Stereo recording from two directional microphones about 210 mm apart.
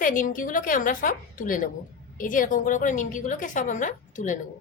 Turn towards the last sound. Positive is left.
turn(degrees=35)  # may be behind; listen again after turning